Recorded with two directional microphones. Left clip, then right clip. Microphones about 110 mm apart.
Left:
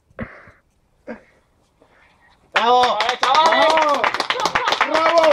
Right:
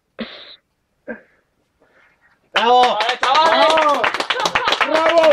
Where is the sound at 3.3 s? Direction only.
5° right (ahead or behind).